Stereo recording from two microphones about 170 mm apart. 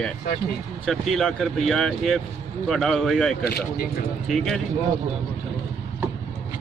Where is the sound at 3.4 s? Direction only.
70° left (ahead or behind).